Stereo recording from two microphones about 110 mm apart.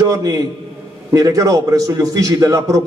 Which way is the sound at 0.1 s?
30° right (ahead or behind).